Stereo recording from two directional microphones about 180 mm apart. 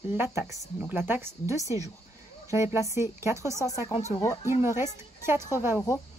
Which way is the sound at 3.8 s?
35° left (ahead or behind).